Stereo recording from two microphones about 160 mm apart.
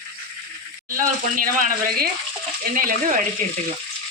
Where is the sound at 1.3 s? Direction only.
60° right (ahead or behind).